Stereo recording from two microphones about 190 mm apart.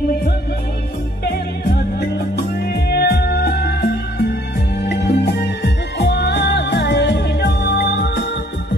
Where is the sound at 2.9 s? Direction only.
55° left (ahead or behind).